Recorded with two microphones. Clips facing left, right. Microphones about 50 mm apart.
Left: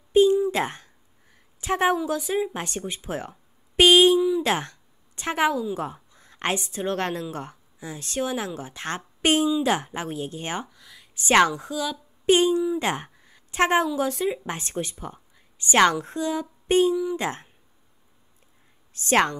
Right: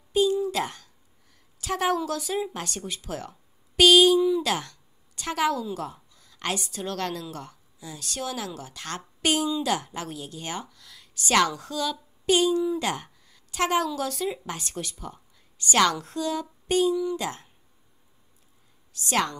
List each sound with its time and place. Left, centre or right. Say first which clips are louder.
0.1 s a sound: left 5 dB; left
1.6 s a woman's voice: left 3 dB; left
11.2 s speech: left 4 dB; left
11.6 s speech: left 1 dB; centre
12.3 s a woman's voice: left 3 dB; left
18.9 s a woman's voice: left 5 dB; left